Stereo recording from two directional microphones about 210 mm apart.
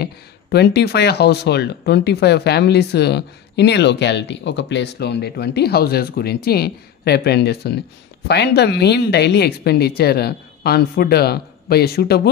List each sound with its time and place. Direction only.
0.0 s speech: 50° left (ahead or behind)